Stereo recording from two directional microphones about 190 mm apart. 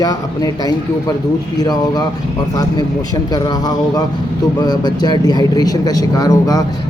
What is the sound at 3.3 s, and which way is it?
Speech, 20° left (ahead or behind).